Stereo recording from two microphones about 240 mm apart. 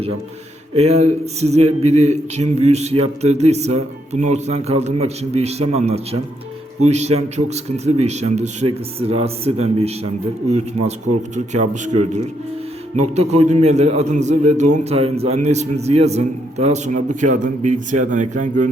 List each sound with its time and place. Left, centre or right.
0.8 s a man's voice: right